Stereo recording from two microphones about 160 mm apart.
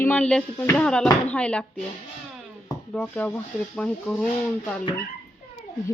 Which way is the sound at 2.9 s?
10° left (ahead or behind).